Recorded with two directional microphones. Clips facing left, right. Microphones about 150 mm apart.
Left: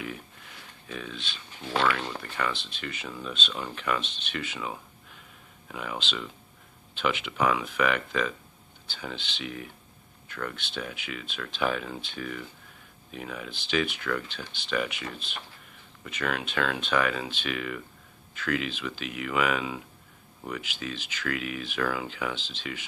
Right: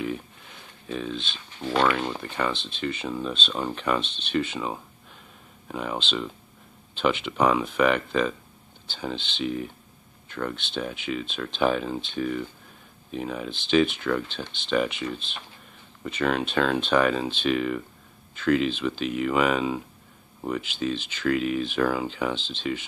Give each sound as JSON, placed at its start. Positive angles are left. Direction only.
{"t": 0.8, "sound": "speech", "side_deg": -25}